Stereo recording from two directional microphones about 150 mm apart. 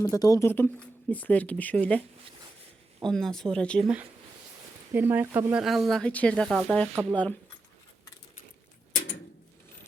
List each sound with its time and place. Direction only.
0.0 s speech: 20° left (ahead or behind); by 3.8 s 5° left (ahead or behind)
4.9 s speech: 15° right (ahead or behind)
5.6 s speech: centre (ahead or behind)